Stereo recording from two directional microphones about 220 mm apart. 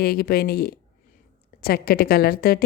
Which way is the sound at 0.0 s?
45° left (ahead or behind).